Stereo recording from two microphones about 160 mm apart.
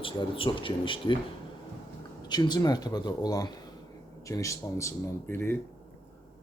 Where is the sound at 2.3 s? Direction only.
25° left (ahead or behind).